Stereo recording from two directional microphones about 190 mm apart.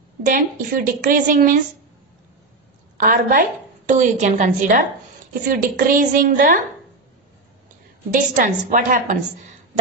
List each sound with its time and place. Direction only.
0.3 s speech: 45° right (ahead or behind)
3.0 s a woman's voice: 45° right (ahead or behind)
8.1 s a woman's voice: 40° right (ahead or behind)